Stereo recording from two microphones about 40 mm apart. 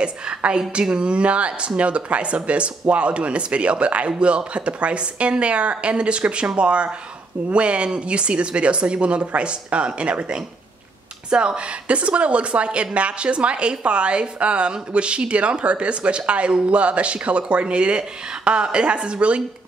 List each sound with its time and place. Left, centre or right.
0.0 s a woman's voice: right